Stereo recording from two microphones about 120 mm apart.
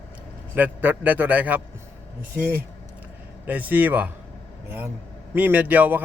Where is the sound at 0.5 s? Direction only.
15° right (ahead or behind).